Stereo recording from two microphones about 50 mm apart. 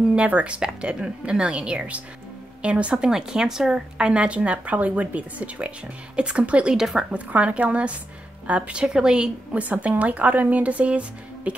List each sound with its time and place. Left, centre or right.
0.1 s a woman's voice: right
6.7 s speech: centre
7.2 s a woman's voice: right
9.6 s a woman's voice: right